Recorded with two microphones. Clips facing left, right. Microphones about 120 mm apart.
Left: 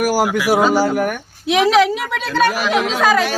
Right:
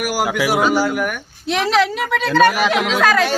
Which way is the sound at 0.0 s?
35° left (ahead or behind).